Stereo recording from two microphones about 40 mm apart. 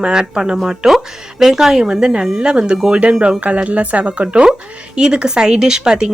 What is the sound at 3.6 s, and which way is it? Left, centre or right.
Speech, right.